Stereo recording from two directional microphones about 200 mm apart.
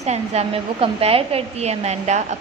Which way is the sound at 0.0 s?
30° right (ahead or behind).